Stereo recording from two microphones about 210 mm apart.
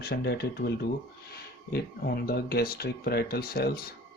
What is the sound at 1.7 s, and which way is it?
Speech, 50° left (ahead or behind).